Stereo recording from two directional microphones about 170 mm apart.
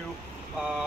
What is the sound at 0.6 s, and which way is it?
Speech, 5° right (ahead or behind).